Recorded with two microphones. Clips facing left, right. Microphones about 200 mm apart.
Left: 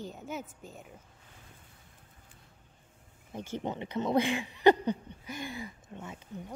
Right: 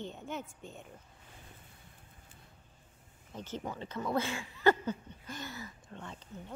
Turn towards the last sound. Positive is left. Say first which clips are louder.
# left 4 dB
turn(degrees=10)  # may be behind; listen again after turning